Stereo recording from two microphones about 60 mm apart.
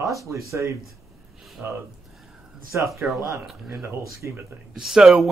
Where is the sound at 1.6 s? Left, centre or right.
Right.